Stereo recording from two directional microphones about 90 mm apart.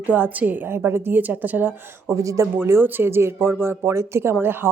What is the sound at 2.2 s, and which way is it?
Speech, 35° right (ahead or behind).